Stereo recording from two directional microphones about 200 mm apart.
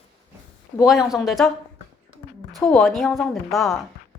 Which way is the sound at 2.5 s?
Centre (ahead or behind).